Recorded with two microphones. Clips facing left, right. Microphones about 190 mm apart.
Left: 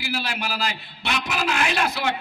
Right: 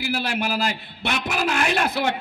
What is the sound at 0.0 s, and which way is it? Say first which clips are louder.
A man's voice: right 4 dB; 50° right (ahead or behind).